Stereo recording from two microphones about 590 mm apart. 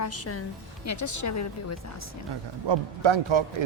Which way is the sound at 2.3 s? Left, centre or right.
Right.